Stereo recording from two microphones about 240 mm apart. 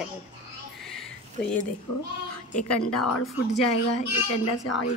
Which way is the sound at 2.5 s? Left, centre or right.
Left.